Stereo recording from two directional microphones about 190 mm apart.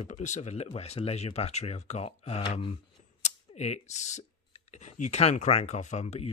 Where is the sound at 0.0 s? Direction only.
40° left (ahead or behind).